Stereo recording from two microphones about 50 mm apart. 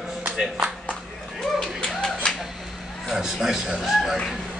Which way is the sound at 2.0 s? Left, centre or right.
Centre.